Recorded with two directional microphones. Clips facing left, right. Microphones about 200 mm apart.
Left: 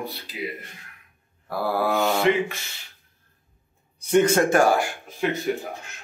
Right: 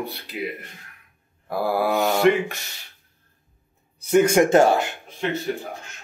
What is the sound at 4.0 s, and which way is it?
Speech, 5° right (ahead or behind).